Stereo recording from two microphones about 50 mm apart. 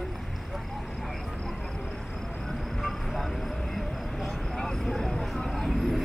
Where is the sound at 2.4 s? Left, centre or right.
Centre.